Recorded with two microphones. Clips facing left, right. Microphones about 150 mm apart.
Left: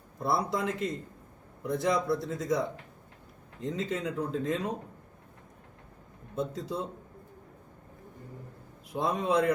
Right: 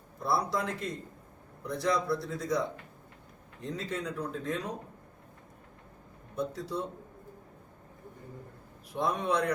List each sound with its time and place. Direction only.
0.2 s speech: 20° left (ahead or behind)
6.3 s speech: 20° left (ahead or behind)
8.9 s speech: 20° left (ahead or behind)